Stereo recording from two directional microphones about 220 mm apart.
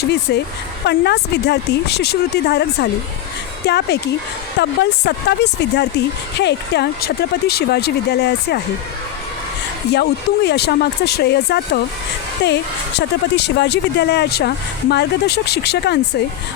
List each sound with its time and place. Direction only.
0.0 s speech: 50° left (ahead or behind)
9.9 s speech: 50° left (ahead or behind)